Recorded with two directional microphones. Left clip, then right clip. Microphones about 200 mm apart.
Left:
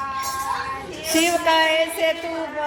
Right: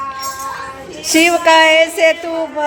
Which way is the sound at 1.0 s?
40° right (ahead or behind).